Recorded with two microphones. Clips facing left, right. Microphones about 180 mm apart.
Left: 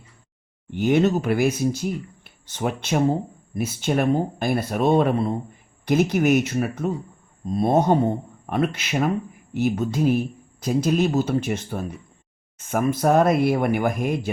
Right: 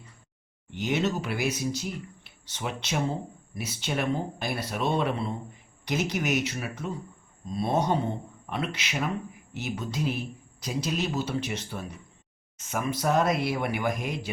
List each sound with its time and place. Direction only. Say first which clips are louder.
0.7 s speech: left 9 dB; 50° left (ahead or behind)